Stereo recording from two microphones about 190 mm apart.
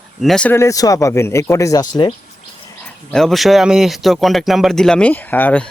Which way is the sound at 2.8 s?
5° left (ahead or behind).